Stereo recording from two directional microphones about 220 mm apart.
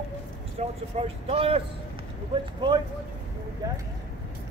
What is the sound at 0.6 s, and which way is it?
Speech, 25° right (ahead or behind).